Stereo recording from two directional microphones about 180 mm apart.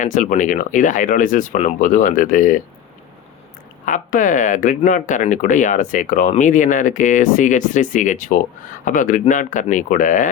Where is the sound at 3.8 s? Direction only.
45° left (ahead or behind).